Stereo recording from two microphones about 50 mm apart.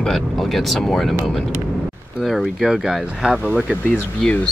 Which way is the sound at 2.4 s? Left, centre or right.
Centre.